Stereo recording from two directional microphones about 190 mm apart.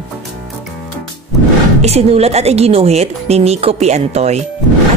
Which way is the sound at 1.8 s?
35° right (ahead or behind).